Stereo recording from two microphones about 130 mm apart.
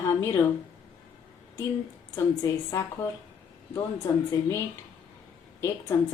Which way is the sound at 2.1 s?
25° left (ahead or behind).